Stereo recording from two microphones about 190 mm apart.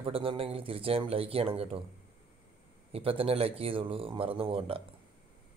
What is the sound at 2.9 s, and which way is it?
A man's voice, 30° right (ahead or behind).